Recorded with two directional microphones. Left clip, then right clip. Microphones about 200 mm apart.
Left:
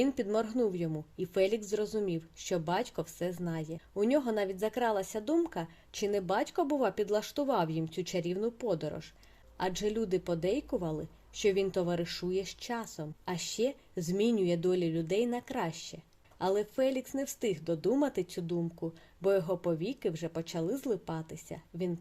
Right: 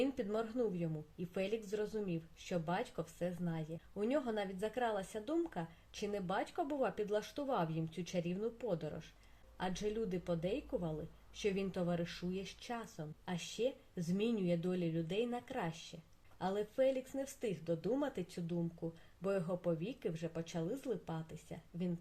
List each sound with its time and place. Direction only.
0.0 s a woman's voice: 45° left (ahead or behind)